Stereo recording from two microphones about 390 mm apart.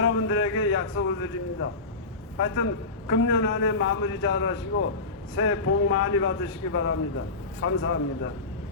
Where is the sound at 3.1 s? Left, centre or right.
Left.